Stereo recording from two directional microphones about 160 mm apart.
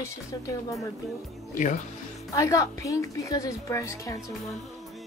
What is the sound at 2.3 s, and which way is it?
A woman's voice, 20° left (ahead or behind).